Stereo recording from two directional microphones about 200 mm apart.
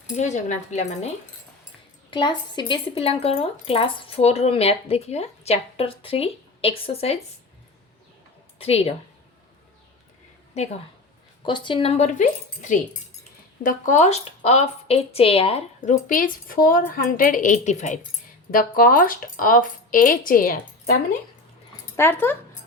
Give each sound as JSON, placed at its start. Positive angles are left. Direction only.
{"t": 0.2, "sound": "a woman's voice", "side_deg": 35}
{"t": 2.0, "sound": "speech", "side_deg": 25}
{"t": 8.5, "sound": "speech", "side_deg": 30}
{"t": 11.4, "sound": "a woman's voice", "side_deg": 25}
{"t": 16.0, "sound": "a woman's voice", "side_deg": 45}
{"t": 21.9, "sound": "speech", "side_deg": 10}